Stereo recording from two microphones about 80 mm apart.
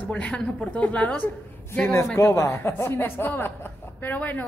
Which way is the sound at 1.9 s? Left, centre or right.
Left.